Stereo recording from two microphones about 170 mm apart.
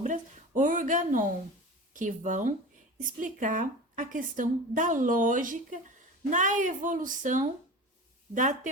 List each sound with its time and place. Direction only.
0.0 s a woman's voice: 45° right (ahead or behind)